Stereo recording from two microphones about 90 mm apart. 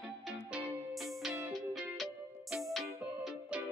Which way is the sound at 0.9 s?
Centre (ahead or behind).